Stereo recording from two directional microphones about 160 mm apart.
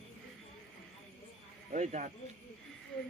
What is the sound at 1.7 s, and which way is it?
Speech, 50° right (ahead or behind).